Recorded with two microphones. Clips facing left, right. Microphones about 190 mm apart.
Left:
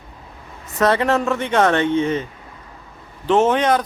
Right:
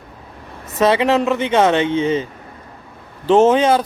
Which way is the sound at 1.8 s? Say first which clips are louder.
Right 1 dB; 90° right.